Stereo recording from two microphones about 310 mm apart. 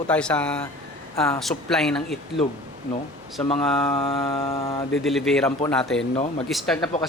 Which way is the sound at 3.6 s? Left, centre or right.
Centre.